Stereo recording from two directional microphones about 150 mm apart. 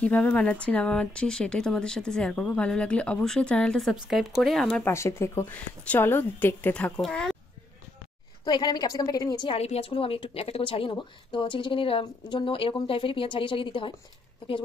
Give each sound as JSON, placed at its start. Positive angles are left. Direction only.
{"t": 0.0, "sound": "speech", "side_deg": 10}
{"t": 4.8, "sound": "speech", "side_deg": 20}
{"t": 8.5, "sound": "a woman's voice", "side_deg": 30}
{"t": 9.6, "sound": "speech", "side_deg": 40}